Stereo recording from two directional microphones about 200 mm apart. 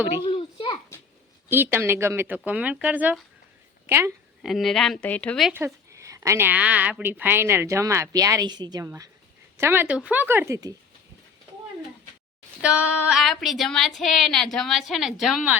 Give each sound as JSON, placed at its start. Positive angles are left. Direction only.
{"t": 0.2, "sound": "a sound", "side_deg": 25}
{"t": 1.5, "sound": "a woman's voice", "side_deg": -10}
{"t": 4.4, "sound": "a woman's voice", "side_deg": 0}
{"t": 5.5, "sound": "a woman's voice", "side_deg": -15}
{"t": 12.6, "sound": "a woman's voice", "side_deg": -5}